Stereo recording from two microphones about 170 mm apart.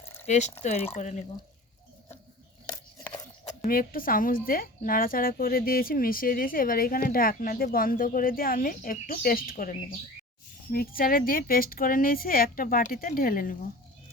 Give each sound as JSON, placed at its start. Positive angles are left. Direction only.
{"t": 0.0, "sound": "pour", "side_deg": 15}
{"t": 0.3, "sound": "speech", "side_deg": 45}
{"t": 3.7, "sound": "a woman's voice", "side_deg": 55}